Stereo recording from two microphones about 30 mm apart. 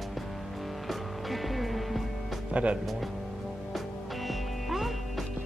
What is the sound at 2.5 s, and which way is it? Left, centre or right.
Speech, right.